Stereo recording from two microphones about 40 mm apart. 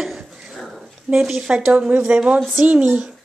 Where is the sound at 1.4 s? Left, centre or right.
Right.